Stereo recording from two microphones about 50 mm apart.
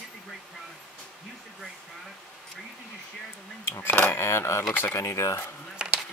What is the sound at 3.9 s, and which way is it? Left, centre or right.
Speech, left.